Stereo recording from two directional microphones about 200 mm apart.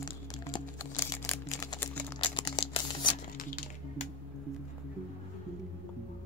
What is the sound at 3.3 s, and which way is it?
Music, 45° left (ahead or behind).